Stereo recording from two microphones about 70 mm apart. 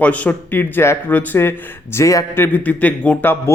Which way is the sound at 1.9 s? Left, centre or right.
Left.